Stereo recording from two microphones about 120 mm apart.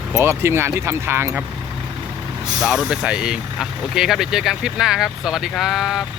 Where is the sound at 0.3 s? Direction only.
20° right (ahead or behind).